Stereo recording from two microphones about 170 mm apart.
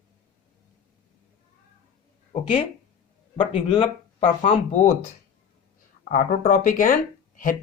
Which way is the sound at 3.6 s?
35° left (ahead or behind).